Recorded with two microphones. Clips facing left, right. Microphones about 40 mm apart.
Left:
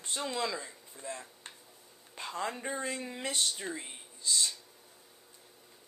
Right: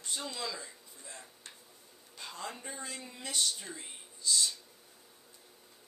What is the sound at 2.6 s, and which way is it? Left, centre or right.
Speech, left.